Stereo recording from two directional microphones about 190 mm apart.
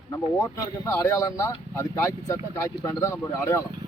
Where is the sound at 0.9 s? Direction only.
15° left (ahead or behind).